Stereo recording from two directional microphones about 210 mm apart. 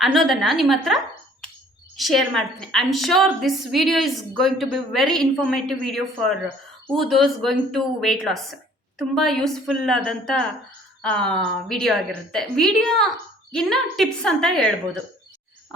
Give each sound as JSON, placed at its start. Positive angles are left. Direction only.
{"t": 0.0, "sound": "a woman's voice", "side_deg": 0}
{"t": 2.0, "sound": "a woman's voice", "side_deg": 0}